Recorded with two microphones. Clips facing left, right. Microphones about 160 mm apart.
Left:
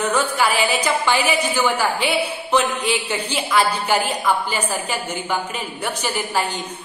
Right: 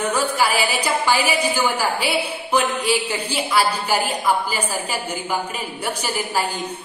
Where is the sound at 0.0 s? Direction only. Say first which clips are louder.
Left 1 dB; 10° right (ahead or behind).